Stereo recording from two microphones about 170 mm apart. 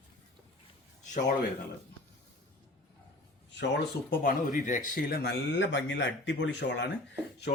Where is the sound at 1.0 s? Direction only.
45° left (ahead or behind).